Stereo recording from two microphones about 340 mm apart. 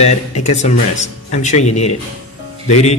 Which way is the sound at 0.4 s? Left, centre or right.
Centre.